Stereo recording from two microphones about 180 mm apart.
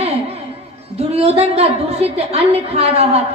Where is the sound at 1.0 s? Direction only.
35° right (ahead or behind).